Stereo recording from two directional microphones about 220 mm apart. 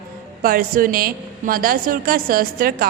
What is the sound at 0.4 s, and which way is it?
A woman's voice, 40° right (ahead or behind).